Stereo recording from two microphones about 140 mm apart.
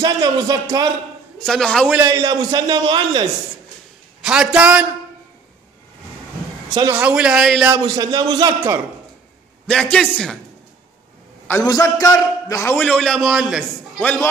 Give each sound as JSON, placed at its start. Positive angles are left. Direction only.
{"t": 0.0, "sound": "a man's voice", "side_deg": -25}
{"t": 1.4, "sound": "a man's voice", "side_deg": 5}
{"t": 2.0, "sound": "a man's voice", "side_deg": -25}
{"t": 4.2, "sound": "a man's voice", "side_deg": -5}
{"t": 6.7, "sound": "a man's voice", "side_deg": -25}
{"t": 7.0, "sound": "a man's voice", "side_deg": -5}
{"t": 7.7, "sound": "a man's voice", "side_deg": -25}
{"t": 9.7, "sound": "a man's voice", "side_deg": 5}
{"t": 11.6, "sound": "a man's voice", "side_deg": 25}
{"t": 12.8, "sound": "a man's voice", "side_deg": 5}
{"t": 13.9, "sound": "a man's voice", "side_deg": 10}